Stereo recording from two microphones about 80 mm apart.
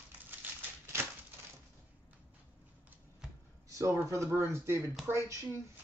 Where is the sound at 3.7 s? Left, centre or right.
Right.